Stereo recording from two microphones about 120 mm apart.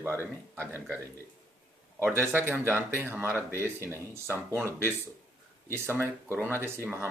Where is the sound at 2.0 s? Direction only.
20° right (ahead or behind).